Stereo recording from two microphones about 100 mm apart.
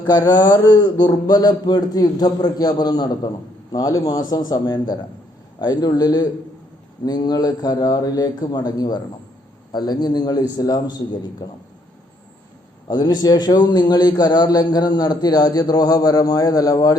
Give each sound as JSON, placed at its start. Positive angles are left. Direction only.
{"t": 0.0, "sound": "a man's voice", "side_deg": 40}
{"t": 12.9, "sound": "a man's voice", "side_deg": 45}